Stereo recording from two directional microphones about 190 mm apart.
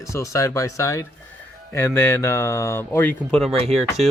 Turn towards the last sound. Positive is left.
turn(degrees=-35)  # may be behind; listen again after turning